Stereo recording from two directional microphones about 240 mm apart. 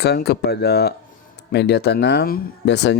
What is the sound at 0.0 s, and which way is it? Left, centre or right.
Speech, left.